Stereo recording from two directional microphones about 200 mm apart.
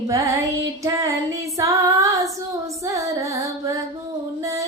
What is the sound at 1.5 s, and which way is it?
Female singing, 15° right (ahead or behind).